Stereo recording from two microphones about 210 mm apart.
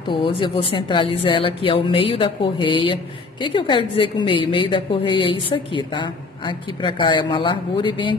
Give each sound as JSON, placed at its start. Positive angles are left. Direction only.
{"t": 0.1, "sound": "a woman's voice", "side_deg": 25}